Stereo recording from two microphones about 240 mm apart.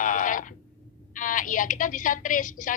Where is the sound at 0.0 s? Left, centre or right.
Left.